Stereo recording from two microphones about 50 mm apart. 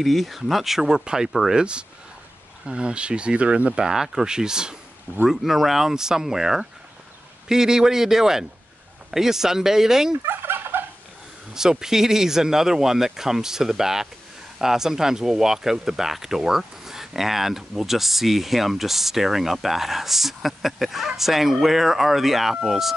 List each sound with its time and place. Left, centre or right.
0.0 s speech: centre; by 3.8 s right
3.8 s speech: centre
5.3 s speech: centre
10.2 s fowl: right
11.5 s speech: centre